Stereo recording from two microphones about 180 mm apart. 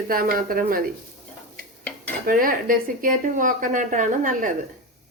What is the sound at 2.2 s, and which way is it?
A woman's voice, 50° right (ahead or behind).